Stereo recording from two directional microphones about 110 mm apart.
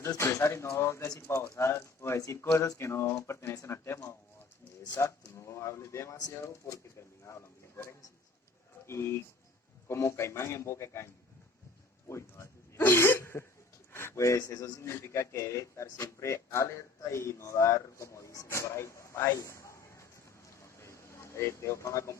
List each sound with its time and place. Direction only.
0.0 s a man's voice: 25° left (ahead or behind)
8.9 s a man's voice: 25° left (ahead or behind)
20.6 s vehicle: 25° left (ahead or behind)